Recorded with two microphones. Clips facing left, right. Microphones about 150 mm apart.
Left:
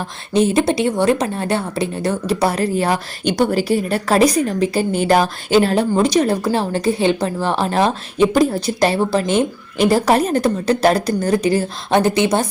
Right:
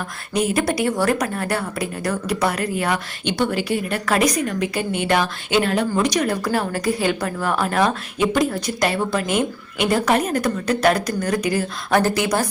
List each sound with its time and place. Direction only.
0.3 s a woman's voice: 25° left (ahead or behind)